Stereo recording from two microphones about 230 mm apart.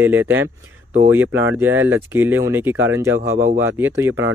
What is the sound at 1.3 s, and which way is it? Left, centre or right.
Speech, right.